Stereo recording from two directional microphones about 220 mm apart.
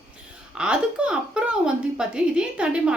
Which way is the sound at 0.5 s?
5° right (ahead or behind).